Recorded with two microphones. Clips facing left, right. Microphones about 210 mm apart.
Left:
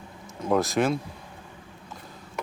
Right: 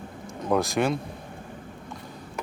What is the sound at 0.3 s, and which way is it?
Speech, centre (ahead or behind).